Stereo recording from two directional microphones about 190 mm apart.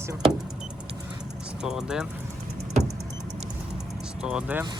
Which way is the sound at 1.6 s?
Centre (ahead or behind).